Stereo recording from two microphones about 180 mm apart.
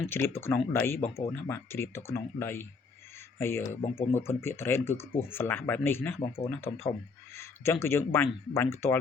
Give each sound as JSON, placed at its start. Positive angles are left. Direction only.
{"t": 0.0, "sound": "speech", "side_deg": 15}
{"t": 3.8, "sound": "speech", "side_deg": 35}
{"t": 4.1, "sound": "speech", "side_deg": 15}
{"t": 7.3, "sound": "speech", "side_deg": 15}